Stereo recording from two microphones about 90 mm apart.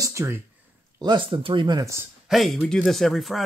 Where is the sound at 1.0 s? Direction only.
60° right (ahead or behind).